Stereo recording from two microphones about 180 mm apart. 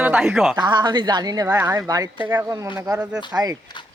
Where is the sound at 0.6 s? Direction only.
25° right (ahead or behind).